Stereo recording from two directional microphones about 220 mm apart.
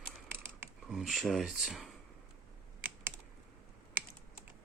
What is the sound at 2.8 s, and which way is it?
Typing, 10° right (ahead or behind).